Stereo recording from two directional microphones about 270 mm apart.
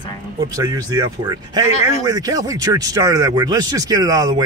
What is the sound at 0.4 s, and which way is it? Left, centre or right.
Speech, centre.